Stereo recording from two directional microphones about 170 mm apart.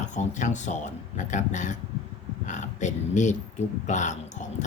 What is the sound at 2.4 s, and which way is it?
Speech, 45° left (ahead or behind).